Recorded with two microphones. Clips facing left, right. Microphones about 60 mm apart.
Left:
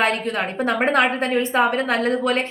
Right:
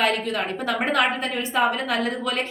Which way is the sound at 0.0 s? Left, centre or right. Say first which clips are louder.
Left 2 dB; left.